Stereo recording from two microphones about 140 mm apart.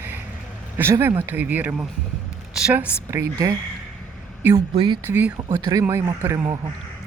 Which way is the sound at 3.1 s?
20° right (ahead or behind).